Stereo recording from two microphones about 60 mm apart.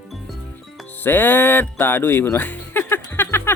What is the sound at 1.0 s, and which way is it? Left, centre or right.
Music, left.